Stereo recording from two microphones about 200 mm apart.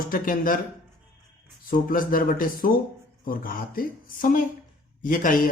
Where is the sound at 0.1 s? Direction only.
45° left (ahead or behind).